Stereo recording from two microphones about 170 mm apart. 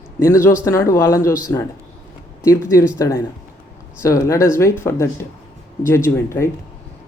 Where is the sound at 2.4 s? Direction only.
15° left (ahead or behind).